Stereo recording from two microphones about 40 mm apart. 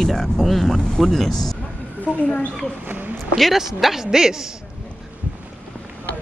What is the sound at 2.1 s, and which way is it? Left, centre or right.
Speech, right.